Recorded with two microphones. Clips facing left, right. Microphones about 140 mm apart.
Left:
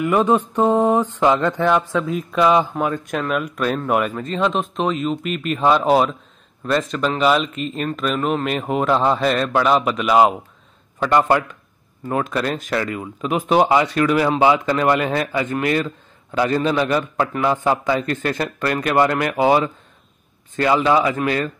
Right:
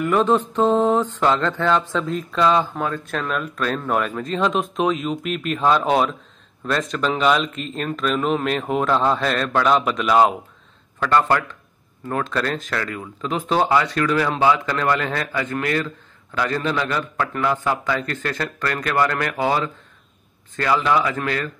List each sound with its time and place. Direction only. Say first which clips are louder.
0.0 s music: left 1 dB; 10° left (ahead or behind)
6.6 s speech: left 2 dB; 5° left (ahead or behind)
11.0 s music: left 2 dB; 15° left (ahead or behind)
14.4 s a man's voice: left 3 dB; 20° left (ahead or behind)